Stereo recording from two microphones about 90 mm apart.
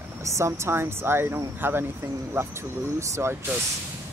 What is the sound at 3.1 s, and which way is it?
Speech, 30° right (ahead or behind).